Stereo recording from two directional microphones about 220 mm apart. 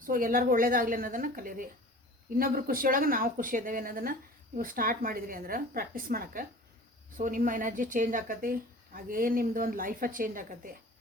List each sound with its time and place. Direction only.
0.0 s speech: 40° right (ahead or behind)